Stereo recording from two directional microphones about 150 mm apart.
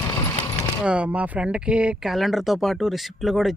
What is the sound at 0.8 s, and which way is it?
Speech, 10° right (ahead or behind).